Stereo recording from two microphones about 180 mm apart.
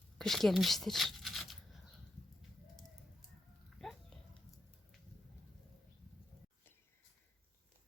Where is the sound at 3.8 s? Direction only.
5° left (ahead or behind).